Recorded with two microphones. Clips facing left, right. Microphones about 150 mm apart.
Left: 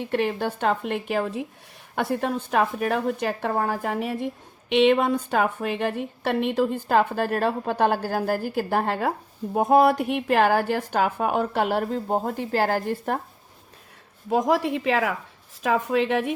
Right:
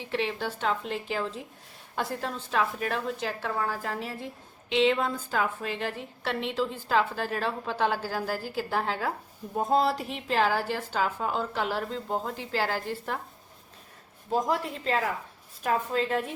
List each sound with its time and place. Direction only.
0.0 s a woman's voice: 50° left (ahead or behind)
9.6 s a woman's voice: 70° left (ahead or behind); by 13.2 s 50° left (ahead or behind)
14.3 s a woman's voice: 75° left (ahead or behind)